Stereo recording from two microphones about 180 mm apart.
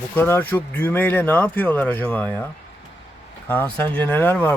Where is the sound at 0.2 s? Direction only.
10° left (ahead or behind).